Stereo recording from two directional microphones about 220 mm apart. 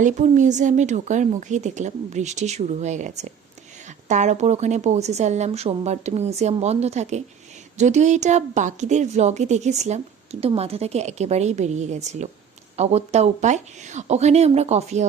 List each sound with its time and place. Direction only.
0.0 s a woman's voice: 35° right (ahead or behind)